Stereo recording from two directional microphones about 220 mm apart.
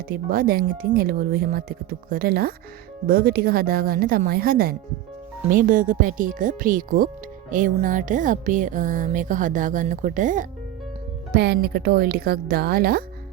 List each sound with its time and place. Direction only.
0.1 s speech: 40° right (ahead or behind)
11.3 s speech: 45° right (ahead or behind)